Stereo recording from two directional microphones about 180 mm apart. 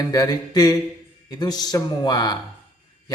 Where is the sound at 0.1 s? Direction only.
20° left (ahead or behind).